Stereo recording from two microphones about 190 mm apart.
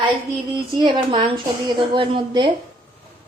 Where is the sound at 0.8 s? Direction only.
25° right (ahead or behind).